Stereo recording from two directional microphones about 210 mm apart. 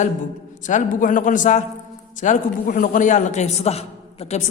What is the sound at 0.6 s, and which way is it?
Speech, 35° left (ahead or behind).